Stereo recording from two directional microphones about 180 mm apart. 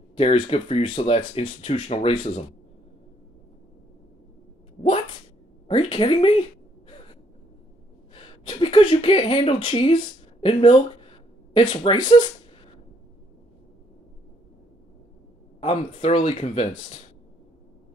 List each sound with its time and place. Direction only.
0.1 s speech: 35° left (ahead or behind)
4.8 s cat: 40° left (ahead or behind)
5.7 s speech: 30° left (ahead or behind)
8.1 s a sound: 30° left (ahead or behind)
10.4 s speech: 30° left (ahead or behind)
15.6 s speech: 35° left (ahead or behind)